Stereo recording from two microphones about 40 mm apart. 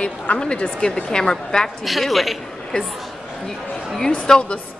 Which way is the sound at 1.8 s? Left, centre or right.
Centre.